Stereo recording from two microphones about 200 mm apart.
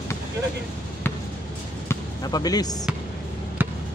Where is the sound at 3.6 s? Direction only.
10° right (ahead or behind).